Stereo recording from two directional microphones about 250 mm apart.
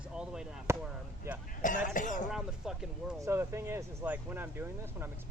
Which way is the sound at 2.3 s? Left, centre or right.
Centre.